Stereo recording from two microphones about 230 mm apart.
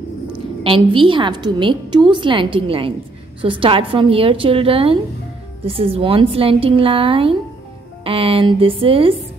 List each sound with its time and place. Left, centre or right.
0.7 s a woman's voice: right